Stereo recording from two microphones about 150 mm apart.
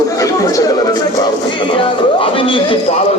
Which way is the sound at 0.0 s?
25° left (ahead or behind).